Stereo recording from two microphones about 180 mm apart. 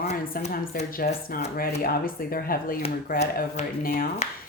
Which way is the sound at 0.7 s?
50° left (ahead or behind).